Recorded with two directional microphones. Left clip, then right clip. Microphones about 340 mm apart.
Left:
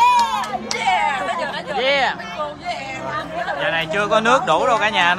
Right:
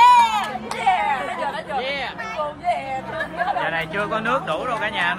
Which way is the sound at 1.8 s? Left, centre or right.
Left.